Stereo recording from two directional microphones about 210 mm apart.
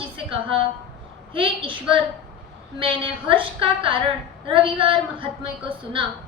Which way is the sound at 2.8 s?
25° right (ahead or behind).